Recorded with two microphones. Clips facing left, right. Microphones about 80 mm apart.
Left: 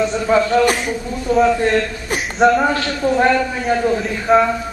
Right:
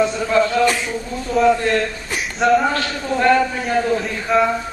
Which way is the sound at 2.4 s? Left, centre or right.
Centre.